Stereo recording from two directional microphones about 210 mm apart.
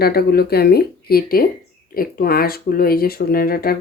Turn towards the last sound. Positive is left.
turn(degrees=45)  # may be behind; listen again after turning